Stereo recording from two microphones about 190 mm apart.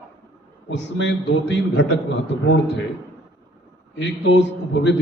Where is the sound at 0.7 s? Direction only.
70° left (ahead or behind).